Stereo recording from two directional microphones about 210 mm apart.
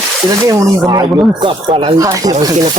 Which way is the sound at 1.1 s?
Centre (ahead or behind).